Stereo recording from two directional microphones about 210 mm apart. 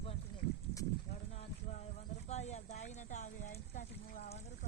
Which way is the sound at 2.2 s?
30° left (ahead or behind).